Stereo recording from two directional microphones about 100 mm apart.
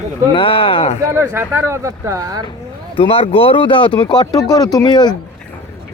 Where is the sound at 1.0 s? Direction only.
25° right (ahead or behind).